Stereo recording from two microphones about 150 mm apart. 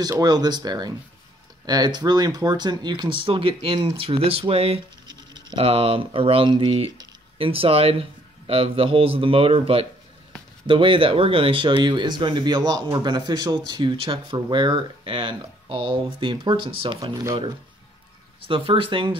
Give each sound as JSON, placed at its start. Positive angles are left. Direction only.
{"t": 0.0, "sound": "speech", "side_deg": -25}
{"t": 18.5, "sound": "speech", "side_deg": -35}